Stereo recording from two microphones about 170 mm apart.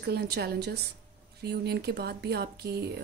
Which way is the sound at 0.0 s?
70° right (ahead or behind).